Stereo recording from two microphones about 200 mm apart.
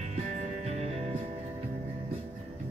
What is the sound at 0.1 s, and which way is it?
Music, 35° right (ahead or behind).